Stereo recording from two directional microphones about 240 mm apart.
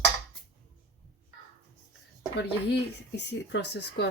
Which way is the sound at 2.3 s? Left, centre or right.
Left.